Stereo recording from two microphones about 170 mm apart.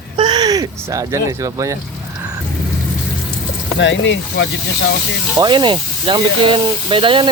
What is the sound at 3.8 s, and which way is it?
Speech, 90° left.